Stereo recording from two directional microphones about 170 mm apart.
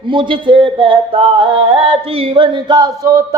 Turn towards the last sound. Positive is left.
turn(degrees=-20)  # may be behind; listen again after turning